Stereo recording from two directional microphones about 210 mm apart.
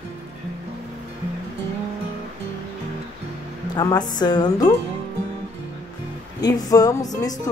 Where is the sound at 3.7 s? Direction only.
20° left (ahead or behind).